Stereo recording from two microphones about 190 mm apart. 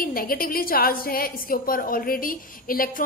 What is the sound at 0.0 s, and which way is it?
A woman's voice, 50° left (ahead or behind).